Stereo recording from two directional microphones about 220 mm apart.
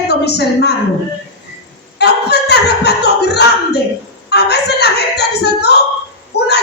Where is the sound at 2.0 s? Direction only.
50° left (ahead or behind).